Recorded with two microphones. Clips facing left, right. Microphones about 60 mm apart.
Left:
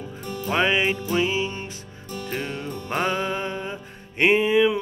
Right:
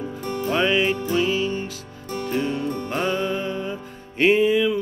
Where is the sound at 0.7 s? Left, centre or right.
Centre.